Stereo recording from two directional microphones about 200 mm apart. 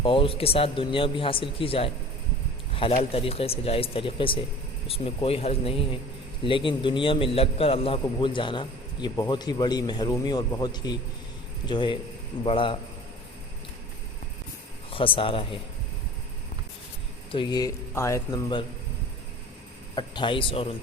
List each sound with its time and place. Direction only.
0.0 s a man's voice: 25° left (ahead or behind)
14.8 s speech: 25° left (ahead or behind)
17.3 s a man's voice: 20° left (ahead or behind)
20.0 s a man's voice: 25° left (ahead or behind)